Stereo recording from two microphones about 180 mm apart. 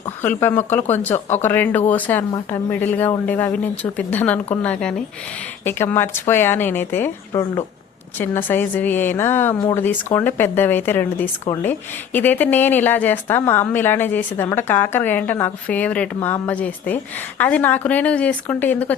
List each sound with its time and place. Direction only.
0.2 s speech: 10° left (ahead or behind)